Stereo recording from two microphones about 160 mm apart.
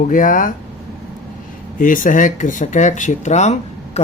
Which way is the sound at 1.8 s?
55° left (ahead or behind).